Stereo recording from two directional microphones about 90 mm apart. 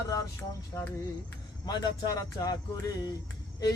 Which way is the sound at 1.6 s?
50° left (ahead or behind).